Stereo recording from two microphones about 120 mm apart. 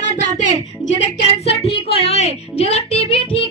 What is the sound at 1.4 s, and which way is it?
Speech, 55° left (ahead or behind).